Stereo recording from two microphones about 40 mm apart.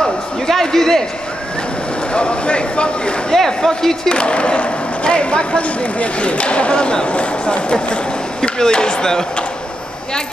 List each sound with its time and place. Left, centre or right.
0.0 s a sound: centre
2.1 s a man's voice: left
3.3 s speech: centre
4.1 s a man's voice: left
7.7 s speech: centre